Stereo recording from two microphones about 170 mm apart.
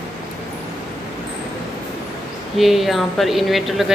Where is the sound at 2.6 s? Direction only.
Centre (ahead or behind).